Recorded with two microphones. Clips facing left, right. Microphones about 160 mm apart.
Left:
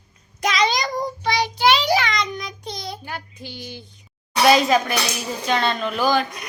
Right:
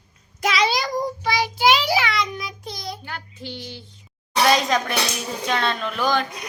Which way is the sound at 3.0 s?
15° left (ahead or behind).